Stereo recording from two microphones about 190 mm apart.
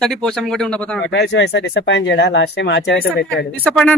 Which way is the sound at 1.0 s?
65° left (ahead or behind).